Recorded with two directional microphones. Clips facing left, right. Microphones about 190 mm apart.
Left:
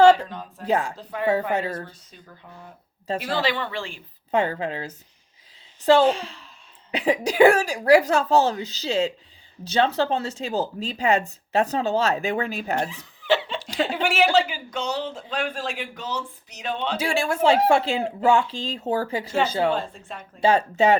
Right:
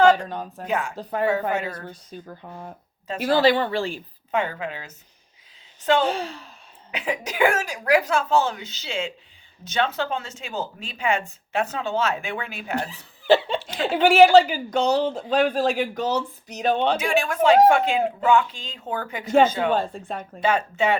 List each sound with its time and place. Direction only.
0.3 s speech: 45° right (ahead or behind)
0.7 s speech: 35° left (ahead or behind)
0.9 s speech: 40° right (ahead or behind)
1.3 s speech: 35° left (ahead or behind)
1.9 s speech: 45° right (ahead or behind)
4.3 s speech: 35° left (ahead or behind)
6.1 s speech: 50° right (ahead or behind)
6.9 s speech: 35° left (ahead or behind)
13.2 s laughter: 35° right (ahead or behind)
13.9 s speech: 35° right (ahead or behind)
17.2 s speech: 30° left (ahead or behind)